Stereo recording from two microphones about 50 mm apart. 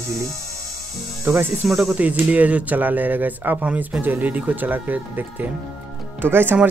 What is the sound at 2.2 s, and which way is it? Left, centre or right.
Speech, right.